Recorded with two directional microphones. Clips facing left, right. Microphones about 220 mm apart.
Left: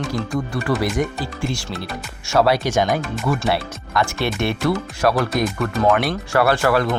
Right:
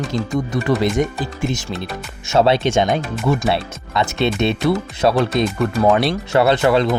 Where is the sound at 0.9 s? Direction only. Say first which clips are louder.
Right 3 dB; 20° right (ahead or behind).